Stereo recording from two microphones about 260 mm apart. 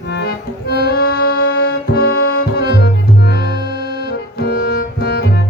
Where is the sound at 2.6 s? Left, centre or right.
Left.